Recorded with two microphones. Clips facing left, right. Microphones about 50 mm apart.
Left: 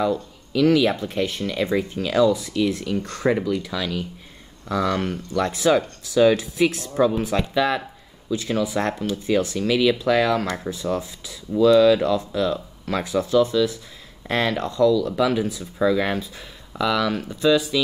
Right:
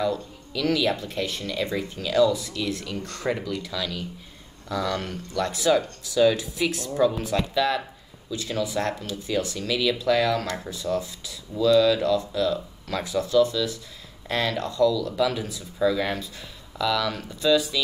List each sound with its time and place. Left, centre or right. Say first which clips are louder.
0.0 s speech: left 3 dB; left